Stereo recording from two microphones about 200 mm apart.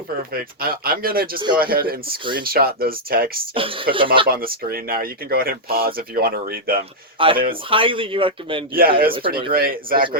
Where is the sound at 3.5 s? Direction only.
25° right (ahead or behind).